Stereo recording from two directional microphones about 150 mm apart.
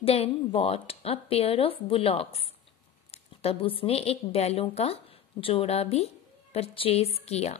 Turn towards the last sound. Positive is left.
turn(degrees=45)  # may be behind; listen again after turning